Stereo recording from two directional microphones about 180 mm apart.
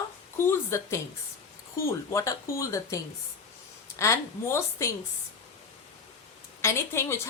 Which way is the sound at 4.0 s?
15° left (ahead or behind).